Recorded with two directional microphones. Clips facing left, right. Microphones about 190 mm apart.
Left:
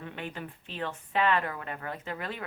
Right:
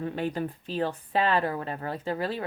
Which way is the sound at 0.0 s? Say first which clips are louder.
Right 9 dB; 35° right (ahead or behind).